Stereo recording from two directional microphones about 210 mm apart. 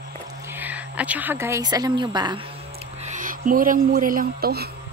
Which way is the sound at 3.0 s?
35° right (ahead or behind).